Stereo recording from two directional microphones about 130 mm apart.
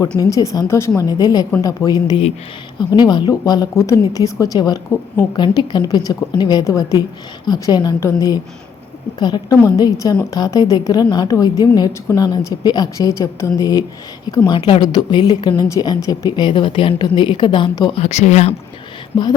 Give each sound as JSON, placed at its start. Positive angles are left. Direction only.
{"t": 0.2, "sound": "speech", "side_deg": 25}
{"t": 18.0, "sound": "speech", "side_deg": 60}